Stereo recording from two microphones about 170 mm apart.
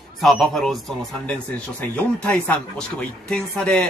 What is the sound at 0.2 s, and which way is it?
Speech, centre (ahead or behind).